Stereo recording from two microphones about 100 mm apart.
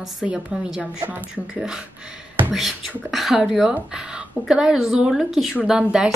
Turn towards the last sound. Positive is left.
turn(degrees=-10)  # may be behind; listen again after turning